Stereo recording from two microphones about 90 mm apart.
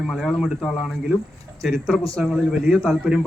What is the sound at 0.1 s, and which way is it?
A man's voice, centre (ahead or behind).